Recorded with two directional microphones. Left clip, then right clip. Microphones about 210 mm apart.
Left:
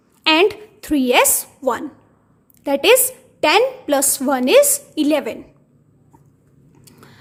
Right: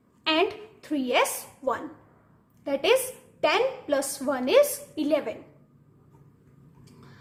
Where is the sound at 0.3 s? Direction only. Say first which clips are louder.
Left 10 dB; 45° left (ahead or behind).